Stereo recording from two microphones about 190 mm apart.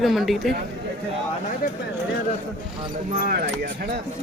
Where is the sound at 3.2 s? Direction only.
50° right (ahead or behind).